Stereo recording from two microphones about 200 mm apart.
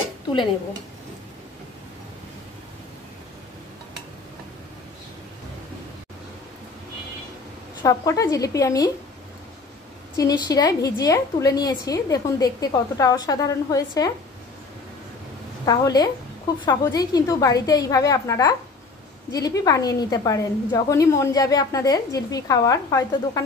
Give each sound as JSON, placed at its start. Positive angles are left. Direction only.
{"t": 7.8, "sound": "a woman's voice", "side_deg": 15}
{"t": 10.1, "sound": "a woman's voice", "side_deg": 20}
{"t": 15.6, "sound": "a woman's voice", "side_deg": 20}